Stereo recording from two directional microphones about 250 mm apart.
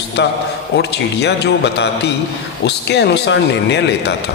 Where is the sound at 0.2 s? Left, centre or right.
Left.